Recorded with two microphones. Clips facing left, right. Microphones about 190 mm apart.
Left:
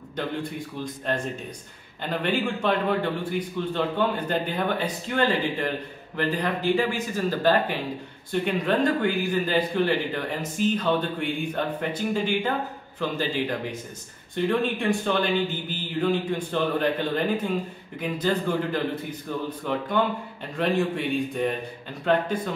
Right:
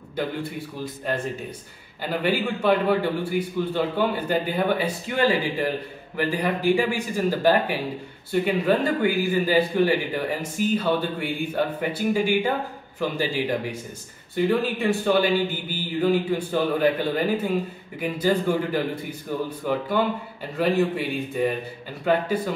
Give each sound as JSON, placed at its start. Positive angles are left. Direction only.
{"t": 0.1, "sound": "a man's voice", "side_deg": -10}